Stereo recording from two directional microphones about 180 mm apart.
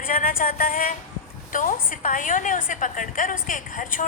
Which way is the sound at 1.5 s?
45° left (ahead or behind).